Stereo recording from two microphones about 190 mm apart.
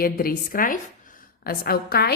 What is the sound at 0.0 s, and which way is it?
A woman's voice, 50° left (ahead or behind).